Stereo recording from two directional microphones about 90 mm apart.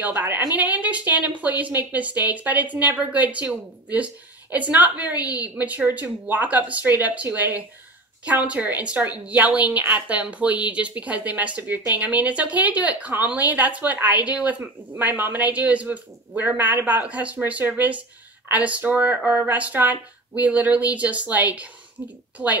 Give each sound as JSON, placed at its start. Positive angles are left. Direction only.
{"t": 0.0, "sound": "a woman's voice", "side_deg": -20}